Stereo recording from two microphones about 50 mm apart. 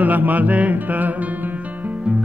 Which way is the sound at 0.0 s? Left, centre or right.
Right.